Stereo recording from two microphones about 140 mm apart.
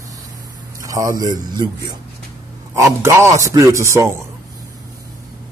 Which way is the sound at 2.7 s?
20° right (ahead or behind).